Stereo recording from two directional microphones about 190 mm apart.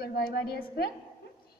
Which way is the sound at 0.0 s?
55° left (ahead or behind).